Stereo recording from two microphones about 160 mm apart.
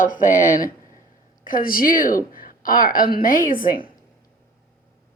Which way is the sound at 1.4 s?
65° left (ahead or behind).